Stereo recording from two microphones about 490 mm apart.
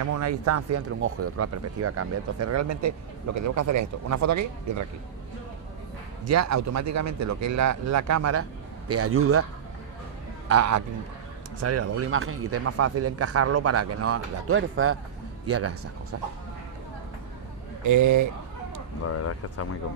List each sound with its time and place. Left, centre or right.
0.0 s speech: right
6.2 s speech: right
10.5 s speech: right
17.8 s speech: right
19.1 s speech: left